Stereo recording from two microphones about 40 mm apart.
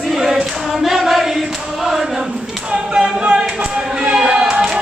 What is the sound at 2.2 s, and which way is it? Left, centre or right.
Clapping, right.